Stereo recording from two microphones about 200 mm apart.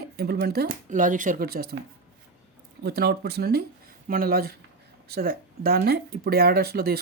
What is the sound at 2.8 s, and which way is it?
Speech, 55° right (ahead or behind).